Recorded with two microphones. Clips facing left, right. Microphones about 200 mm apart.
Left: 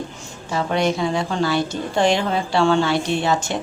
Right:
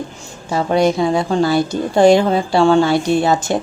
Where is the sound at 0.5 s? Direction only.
40° right (ahead or behind).